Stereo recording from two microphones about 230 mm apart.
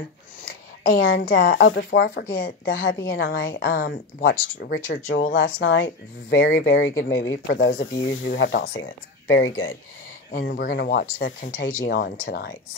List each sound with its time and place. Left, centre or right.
0.5 s a sound: left
1.3 s speech: left
5.3 s speech: left
7.5 s speech: left
7.9 s speech: left
8.5 s speech: left
8.7 s speech: left
10.3 s speech: left
11.6 s speech: left